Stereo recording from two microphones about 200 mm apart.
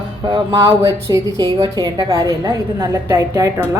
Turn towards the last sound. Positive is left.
turn(degrees=-15)  # may be behind; listen again after turning